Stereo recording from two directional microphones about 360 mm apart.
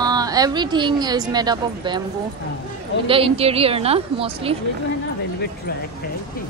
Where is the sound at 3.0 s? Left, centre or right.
Centre.